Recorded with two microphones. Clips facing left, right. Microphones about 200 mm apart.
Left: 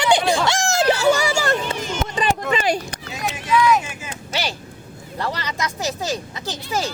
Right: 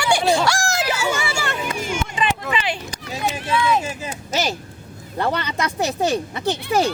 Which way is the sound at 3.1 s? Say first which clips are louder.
Left 2 dB; 30° right (ahead or behind).